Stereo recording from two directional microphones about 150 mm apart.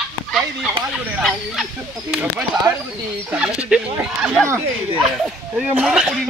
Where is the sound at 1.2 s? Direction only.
5° right (ahead or behind).